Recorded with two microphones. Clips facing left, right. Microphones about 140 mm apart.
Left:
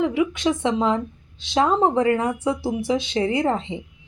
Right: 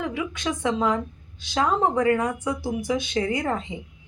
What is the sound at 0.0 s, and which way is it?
A woman's voice, 20° left (ahead or behind).